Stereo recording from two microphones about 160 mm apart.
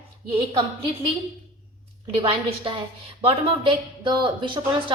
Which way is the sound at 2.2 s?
35° right (ahead or behind).